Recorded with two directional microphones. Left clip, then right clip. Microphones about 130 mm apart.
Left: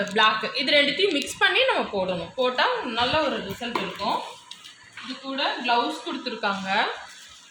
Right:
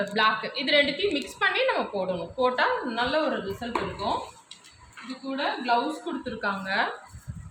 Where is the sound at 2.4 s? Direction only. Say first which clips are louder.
Left 1 dB; 25° left (ahead or behind).